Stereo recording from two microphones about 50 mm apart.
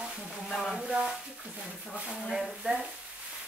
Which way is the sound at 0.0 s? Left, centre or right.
Right.